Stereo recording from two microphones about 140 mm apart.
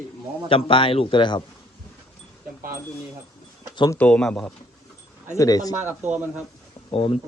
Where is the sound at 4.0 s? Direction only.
5° left (ahead or behind).